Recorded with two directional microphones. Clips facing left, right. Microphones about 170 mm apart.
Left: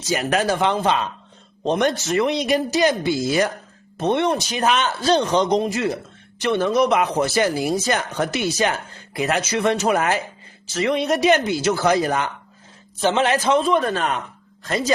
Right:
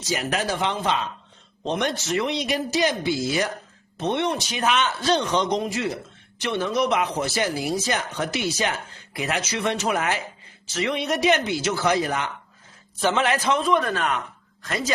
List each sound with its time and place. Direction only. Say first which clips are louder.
0.1 s speech: left 5 dB; 55° left (ahead or behind); by 5.6 s 35° left (ahead or behind)
6.4 s speech: left 5 dB; 50° left (ahead or behind)
13.0 s speech: left 3 dB; 25° left (ahead or behind)